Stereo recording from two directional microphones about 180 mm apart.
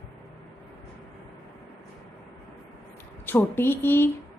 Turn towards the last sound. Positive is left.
turn(degrees=10)  # may be behind; listen again after turning